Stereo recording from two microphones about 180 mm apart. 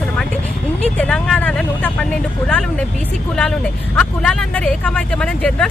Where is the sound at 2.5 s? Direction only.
5° left (ahead or behind).